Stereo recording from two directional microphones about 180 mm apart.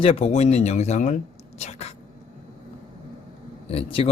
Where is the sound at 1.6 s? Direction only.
35° left (ahead or behind).